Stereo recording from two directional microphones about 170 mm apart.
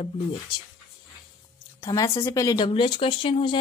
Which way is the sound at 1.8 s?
25° left (ahead or behind).